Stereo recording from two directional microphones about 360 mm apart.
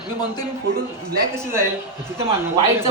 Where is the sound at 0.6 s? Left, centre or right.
Right.